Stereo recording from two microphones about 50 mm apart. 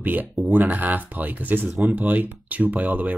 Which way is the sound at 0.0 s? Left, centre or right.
Right.